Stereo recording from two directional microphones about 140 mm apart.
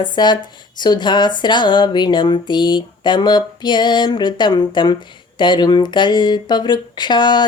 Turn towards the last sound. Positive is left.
turn(degrees=30)  # may be behind; listen again after turning